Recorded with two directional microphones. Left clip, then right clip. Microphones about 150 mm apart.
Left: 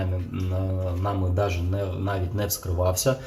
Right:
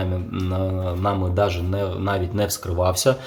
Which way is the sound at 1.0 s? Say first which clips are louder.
Right 6 dB; 5° right (ahead or behind).